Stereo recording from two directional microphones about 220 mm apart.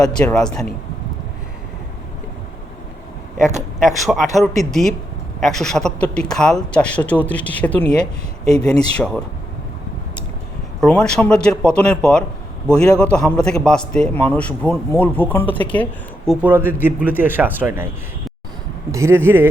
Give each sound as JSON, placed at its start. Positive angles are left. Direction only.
{"t": 0.0, "sound": "a man's voice", "side_deg": 5}
{"t": 3.3, "sound": "speech", "side_deg": -35}
{"t": 3.8, "sound": "a man's voice", "side_deg": 0}
{"t": 10.8, "sound": "a man's voice", "side_deg": 5}
{"t": 18.9, "sound": "speech", "side_deg": -15}